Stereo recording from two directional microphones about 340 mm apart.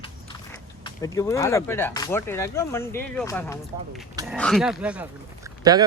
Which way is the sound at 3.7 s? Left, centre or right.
Centre.